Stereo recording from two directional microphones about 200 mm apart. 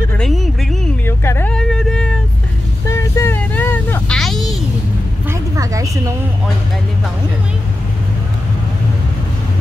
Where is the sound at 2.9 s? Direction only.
15° left (ahead or behind).